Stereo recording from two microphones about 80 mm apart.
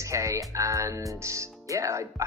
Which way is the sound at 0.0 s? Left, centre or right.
Right.